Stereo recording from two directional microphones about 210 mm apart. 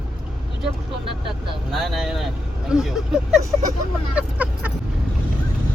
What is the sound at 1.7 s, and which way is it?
Speech, centre (ahead or behind).